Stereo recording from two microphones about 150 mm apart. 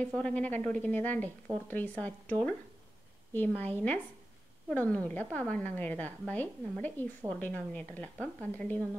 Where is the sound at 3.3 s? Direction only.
10° left (ahead or behind).